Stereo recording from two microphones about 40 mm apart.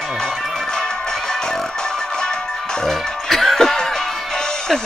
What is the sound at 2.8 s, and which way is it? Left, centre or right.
Music, centre.